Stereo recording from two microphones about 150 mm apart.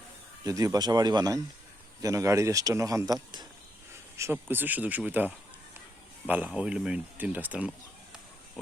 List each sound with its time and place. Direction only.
0.4 s a man's voice: 25° right (ahead or behind)
4.2 s speech: 15° right (ahead or behind)